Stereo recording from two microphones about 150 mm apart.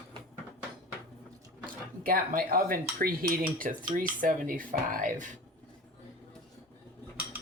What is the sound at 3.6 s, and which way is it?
Speech, 65° right (ahead or behind).